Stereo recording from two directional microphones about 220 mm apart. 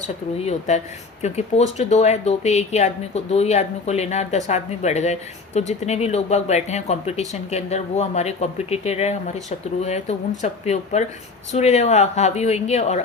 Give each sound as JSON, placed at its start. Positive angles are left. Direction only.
{"t": 0.3, "sound": "speech", "side_deg": 30}